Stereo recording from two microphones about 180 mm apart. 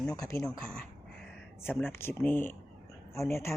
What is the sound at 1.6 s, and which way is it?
Speech, 10° left (ahead or behind).